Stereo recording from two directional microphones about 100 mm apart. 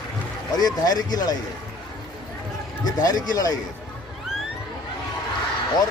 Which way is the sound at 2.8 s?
40° left (ahead or behind).